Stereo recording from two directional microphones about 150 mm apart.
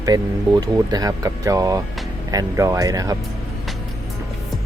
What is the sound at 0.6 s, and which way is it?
Speech, 25° right (ahead or behind).